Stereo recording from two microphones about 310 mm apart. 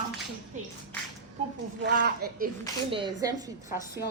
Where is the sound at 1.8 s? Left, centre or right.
Right.